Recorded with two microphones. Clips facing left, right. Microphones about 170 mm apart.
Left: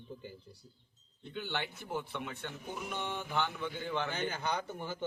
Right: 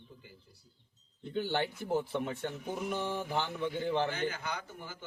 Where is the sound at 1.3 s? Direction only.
40° right (ahead or behind).